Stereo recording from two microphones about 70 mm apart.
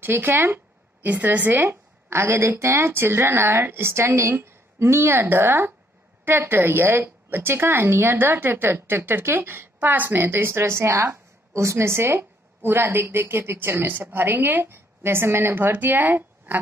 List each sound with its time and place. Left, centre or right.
0.0 s speech: right